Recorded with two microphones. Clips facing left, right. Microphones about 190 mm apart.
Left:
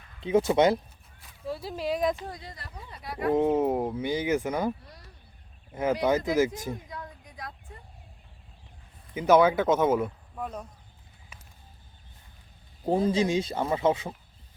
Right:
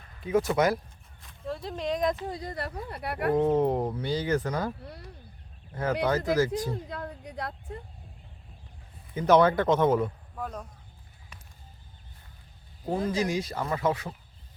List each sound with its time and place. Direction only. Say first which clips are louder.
0.2 s speech: left 3 dB; 25° left (ahead or behind)
1.2 s speech: even; 5° left (ahead or behind)
2.4 s speech: right 10 dB; 60° right (ahead or behind)
3.3 s speech: even; 10° left (ahead or behind)
5.7 s speech: left 2 dB; 15° left (ahead or behind)
6.8 s speech: right 5 dB; 70° right (ahead or behind)
9.1 s a man's voice: left 1 dB; 5° left (ahead or behind)
12.8 s speech: left 4 dB; 30° left (ahead or behind)